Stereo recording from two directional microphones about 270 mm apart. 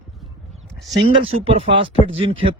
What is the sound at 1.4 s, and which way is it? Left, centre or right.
Speech, right.